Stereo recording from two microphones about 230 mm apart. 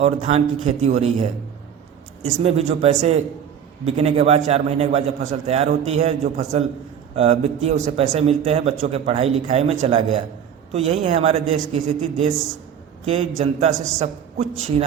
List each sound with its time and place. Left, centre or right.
0.0 s a man's voice: right
2.4 s a man's voice: right